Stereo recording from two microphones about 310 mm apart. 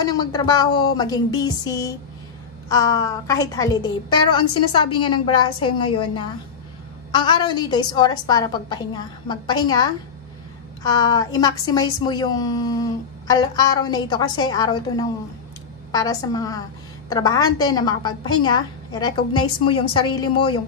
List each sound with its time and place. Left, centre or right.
0.0 s a woman's voice: centre
5.6 s a woman's voice: left
7.2 s a woman's voice: centre